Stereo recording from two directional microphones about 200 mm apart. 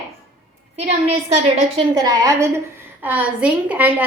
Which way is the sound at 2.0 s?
20° right (ahead or behind).